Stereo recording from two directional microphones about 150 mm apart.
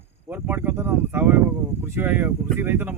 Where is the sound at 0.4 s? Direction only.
15° right (ahead or behind).